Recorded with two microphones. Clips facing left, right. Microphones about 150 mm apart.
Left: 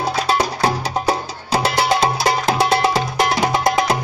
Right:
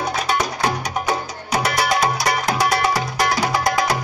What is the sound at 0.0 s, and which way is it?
Music, 30° left (ahead or behind).